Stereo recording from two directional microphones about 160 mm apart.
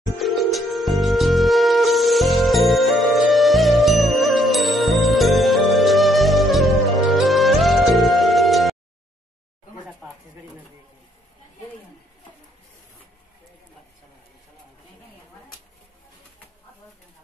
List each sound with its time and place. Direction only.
0.2 s music: centre (ahead or behind)